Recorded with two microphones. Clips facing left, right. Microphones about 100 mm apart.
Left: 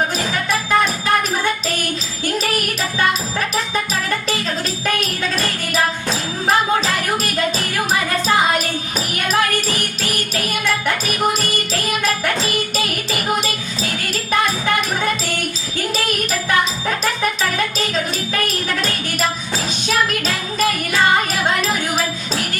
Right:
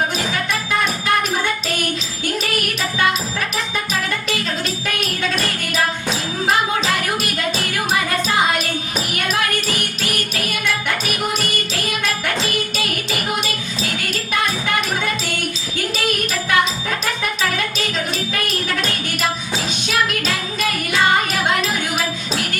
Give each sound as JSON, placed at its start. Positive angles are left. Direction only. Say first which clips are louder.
{"t": 4.9, "sound": "music", "louder": "left 2 dB", "side_deg": 35}
{"t": 9.1, "sound": "music", "louder": "left 3 dB", "side_deg": 35}
{"t": 19.9, "sound": "music", "louder": "left 1 dB", "side_deg": 35}